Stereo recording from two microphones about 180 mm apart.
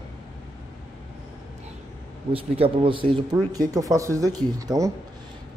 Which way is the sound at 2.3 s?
30° right (ahead or behind).